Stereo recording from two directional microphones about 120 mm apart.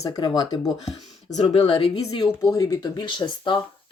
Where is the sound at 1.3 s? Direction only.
65° left (ahead or behind).